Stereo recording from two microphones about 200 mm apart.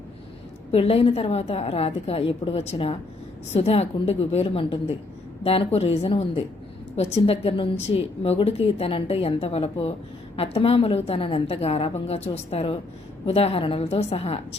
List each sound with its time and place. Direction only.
0.7 s a woman's voice: 30° left (ahead or behind)